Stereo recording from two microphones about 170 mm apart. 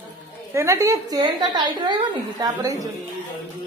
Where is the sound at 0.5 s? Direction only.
15° right (ahead or behind).